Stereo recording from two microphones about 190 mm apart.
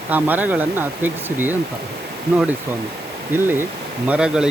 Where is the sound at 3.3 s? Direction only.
10° right (ahead or behind).